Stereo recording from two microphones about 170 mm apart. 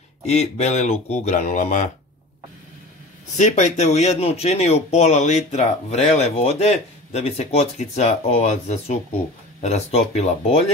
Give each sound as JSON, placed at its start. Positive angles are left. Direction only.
{"t": 0.3, "sound": "speech", "side_deg": 40}
{"t": 3.3, "sound": "speech", "side_deg": 45}